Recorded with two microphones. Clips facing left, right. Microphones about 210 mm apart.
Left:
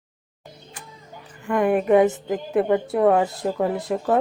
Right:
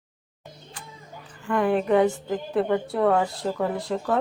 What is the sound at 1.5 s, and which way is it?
A woman's voice, 15° left (ahead or behind).